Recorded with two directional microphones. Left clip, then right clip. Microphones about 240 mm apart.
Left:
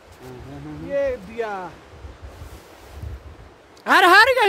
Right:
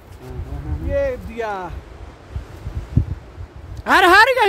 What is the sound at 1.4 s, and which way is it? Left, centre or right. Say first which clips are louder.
Speech: right 3 dB; right.